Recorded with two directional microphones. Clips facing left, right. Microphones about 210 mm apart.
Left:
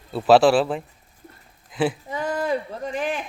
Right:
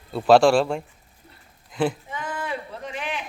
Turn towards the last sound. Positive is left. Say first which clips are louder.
# left 5 dB
turn(degrees=45)  # may be behind; listen again after turning